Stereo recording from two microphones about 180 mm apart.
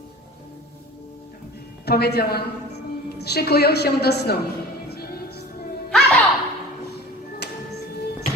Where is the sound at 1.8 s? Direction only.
65° left (ahead or behind).